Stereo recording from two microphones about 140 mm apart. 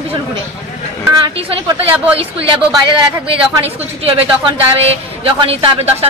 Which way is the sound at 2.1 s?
40° right (ahead or behind).